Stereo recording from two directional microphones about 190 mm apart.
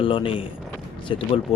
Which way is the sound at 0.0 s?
25° left (ahead or behind).